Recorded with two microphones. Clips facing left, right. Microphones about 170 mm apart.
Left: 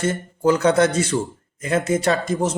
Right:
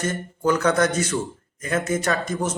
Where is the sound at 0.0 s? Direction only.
25° left (ahead or behind).